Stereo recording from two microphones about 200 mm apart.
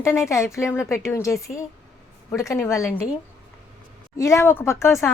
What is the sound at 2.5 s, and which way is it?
Speech, 15° left (ahead or behind).